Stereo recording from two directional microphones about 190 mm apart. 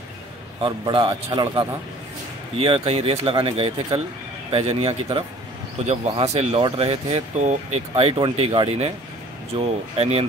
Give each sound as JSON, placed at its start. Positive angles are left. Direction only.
{"t": 0.6, "sound": "a man's voice", "side_deg": -25}
{"t": 9.9, "sound": "speech", "side_deg": -30}